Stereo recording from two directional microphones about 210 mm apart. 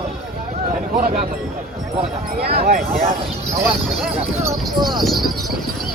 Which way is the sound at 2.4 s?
50° right (ahead or behind).